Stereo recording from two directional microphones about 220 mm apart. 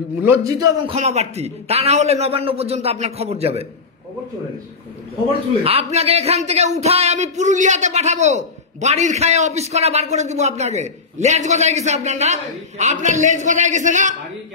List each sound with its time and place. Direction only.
0.2 s a man's voice: 10° right (ahead or behind)
0.9 s a man's voice: 30° right (ahead or behind)
5.6 s speech: 25° right (ahead or behind)